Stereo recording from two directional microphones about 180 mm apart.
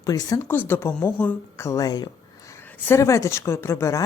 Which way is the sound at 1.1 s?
10° left (ahead or behind).